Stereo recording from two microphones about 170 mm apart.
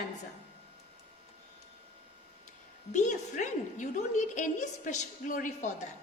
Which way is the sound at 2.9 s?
45° left (ahead or behind).